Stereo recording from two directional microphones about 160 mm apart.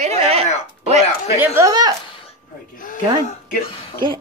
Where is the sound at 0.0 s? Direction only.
40° right (ahead or behind).